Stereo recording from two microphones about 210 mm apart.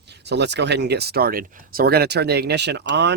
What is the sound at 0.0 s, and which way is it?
Speech, 55° right (ahead or behind).